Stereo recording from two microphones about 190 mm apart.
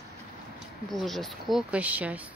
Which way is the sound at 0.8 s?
Centre (ahead or behind).